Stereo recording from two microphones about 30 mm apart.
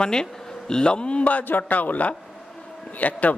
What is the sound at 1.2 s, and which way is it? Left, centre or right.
A man's voice, left.